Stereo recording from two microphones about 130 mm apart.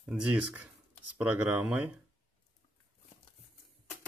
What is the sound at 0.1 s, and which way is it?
Speech, 10° right (ahead or behind).